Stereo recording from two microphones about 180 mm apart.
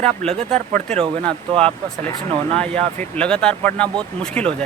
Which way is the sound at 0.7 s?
40° right (ahead or behind).